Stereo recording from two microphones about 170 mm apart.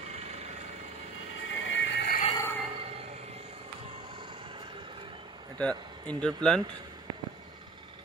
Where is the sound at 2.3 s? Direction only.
15° left (ahead or behind).